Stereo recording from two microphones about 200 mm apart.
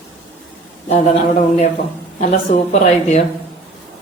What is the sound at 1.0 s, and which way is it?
Speech, 35° left (ahead or behind).